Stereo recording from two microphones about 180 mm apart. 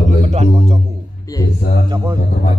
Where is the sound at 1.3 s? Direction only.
20° left (ahead or behind).